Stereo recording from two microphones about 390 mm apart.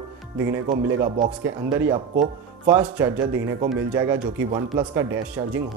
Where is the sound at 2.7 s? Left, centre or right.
Centre.